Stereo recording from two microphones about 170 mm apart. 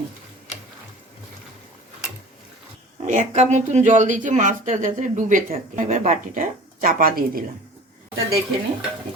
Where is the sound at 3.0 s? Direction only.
45° right (ahead or behind).